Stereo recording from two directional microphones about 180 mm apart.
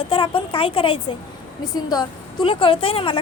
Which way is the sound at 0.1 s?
30° left (ahead or behind).